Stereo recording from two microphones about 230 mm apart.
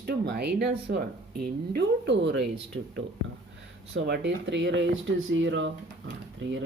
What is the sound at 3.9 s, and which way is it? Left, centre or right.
Speech, right.